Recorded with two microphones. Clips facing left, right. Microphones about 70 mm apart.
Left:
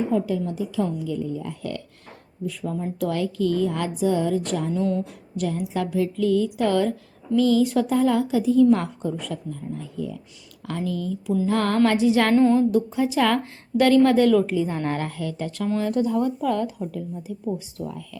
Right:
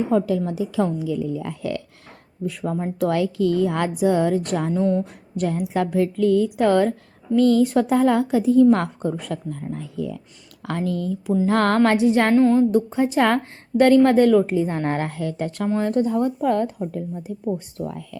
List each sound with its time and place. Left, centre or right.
0.1 s a woman's voice: right
2.5 s speech: right
3.7 s a woman's voice: right
4.7 s speech: right
5.4 s speech: right
6.6 s a woman's voice: right
10.7 s speech: right
12.3 s a sound: centre
12.5 s a woman's voice: right
15.9 s a woman's voice: right
17.8 s speech: right